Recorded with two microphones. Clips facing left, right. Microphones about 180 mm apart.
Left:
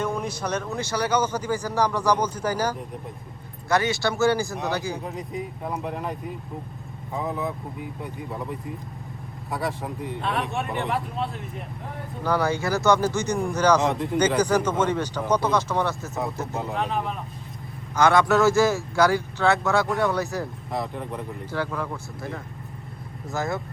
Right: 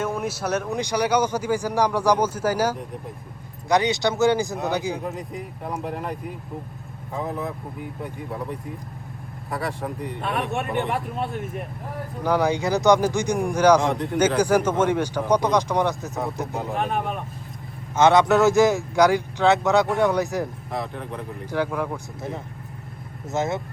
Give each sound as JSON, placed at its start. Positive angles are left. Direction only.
{"t": 0.0, "sound": "speech", "side_deg": -5}
{"t": 5.0, "sound": "speech", "side_deg": 0}
{"t": 12.2, "sound": "speech", "side_deg": -15}
{"t": 13.8, "sound": "speech", "side_deg": 0}
{"t": 16.5, "sound": "speech", "side_deg": 0}
{"t": 17.9, "sound": "speech", "side_deg": -20}
{"t": 20.7, "sound": "speech", "side_deg": 0}
{"t": 21.5, "sound": "speech", "side_deg": -15}
{"t": 23.3, "sound": "speech", "side_deg": -20}